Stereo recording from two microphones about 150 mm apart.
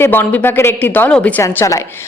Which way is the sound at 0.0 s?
15° left (ahead or behind).